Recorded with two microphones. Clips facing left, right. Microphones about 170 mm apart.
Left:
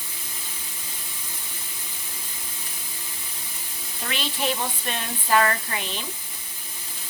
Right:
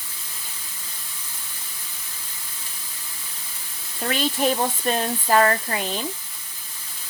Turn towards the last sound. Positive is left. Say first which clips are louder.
# right 5 dB
turn(degrees=-35)  # may be behind; listen again after turning